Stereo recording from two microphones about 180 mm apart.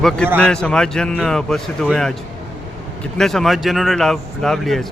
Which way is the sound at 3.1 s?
Centre (ahead or behind).